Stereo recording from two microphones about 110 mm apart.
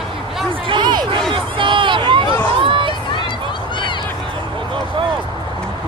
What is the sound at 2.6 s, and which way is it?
Crowd, 50° right (ahead or behind).